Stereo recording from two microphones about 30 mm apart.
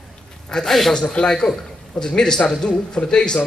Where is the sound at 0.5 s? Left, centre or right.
Left.